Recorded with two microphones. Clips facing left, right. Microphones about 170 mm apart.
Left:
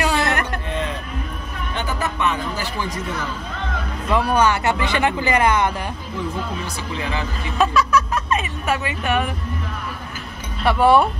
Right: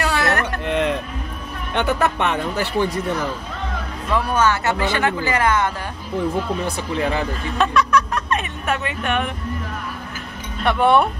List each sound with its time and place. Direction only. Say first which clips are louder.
0.0 s music: even; 15° left (ahead or behind)
0.7 s music: right 6 dB; 70° right (ahead or behind)
1.7 s speech: right 6 dB; 65° right (ahead or behind)
4.1 s speech: left 1 dB; 15° left (ahead or behind)
7.0 s speech: right 5 dB; 50° right (ahead or behind)
7.5 s speech: even; 5° left (ahead or behind)
10.6 s speech: left 1 dB; 5° left (ahead or behind)